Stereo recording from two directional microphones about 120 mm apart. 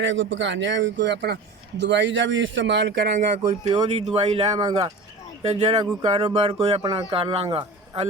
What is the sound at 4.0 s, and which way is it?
Speech, 65° right (ahead or behind).